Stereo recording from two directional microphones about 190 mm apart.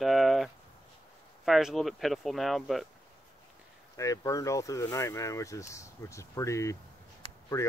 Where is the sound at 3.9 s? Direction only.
15° left (ahead or behind).